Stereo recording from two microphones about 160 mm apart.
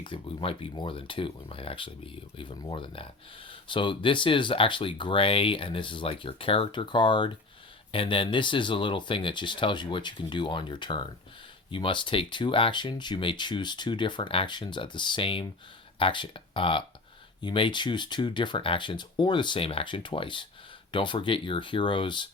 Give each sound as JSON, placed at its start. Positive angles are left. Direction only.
{"t": 0.0, "sound": "speech", "side_deg": 30}